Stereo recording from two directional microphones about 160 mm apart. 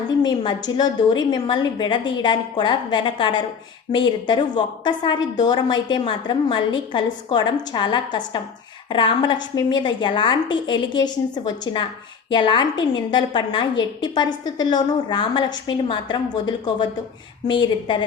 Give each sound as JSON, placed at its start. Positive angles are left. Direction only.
{"t": 0.2, "sound": "a woman's voice", "side_deg": 25}